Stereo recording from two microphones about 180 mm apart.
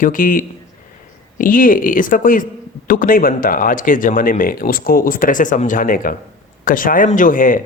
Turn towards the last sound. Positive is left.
turn(degrees=50)  # may be behind; listen again after turning